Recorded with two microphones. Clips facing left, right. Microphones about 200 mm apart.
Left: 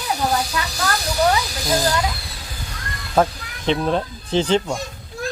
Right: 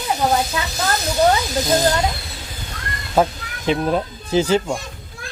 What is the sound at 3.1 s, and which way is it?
Speech, 5° right (ahead or behind).